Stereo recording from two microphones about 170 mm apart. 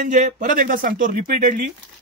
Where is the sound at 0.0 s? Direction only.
50° right (ahead or behind).